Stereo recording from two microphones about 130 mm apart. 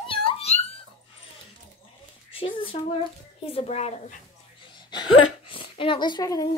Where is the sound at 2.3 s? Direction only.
45° left (ahead or behind).